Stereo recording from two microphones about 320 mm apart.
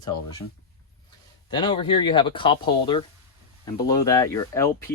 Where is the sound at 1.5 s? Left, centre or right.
Centre.